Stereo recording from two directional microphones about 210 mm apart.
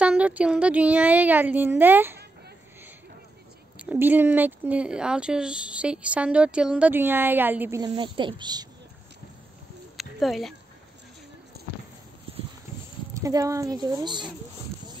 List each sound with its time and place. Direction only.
0.0 s speech: 5° right (ahead or behind)
3.7 s speech: 5° right (ahead or behind)
7.8 s a woman's voice: 25° right (ahead or behind)
9.9 s a sound: centre (ahead or behind)
11.6 s clip-clop: 50° right (ahead or behind)
13.2 s speech: 15° right (ahead or behind)